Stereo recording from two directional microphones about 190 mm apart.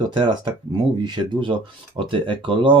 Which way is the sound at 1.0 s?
25° right (ahead or behind).